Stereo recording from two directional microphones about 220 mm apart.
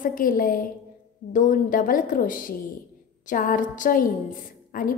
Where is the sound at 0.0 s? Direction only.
40° left (ahead or behind).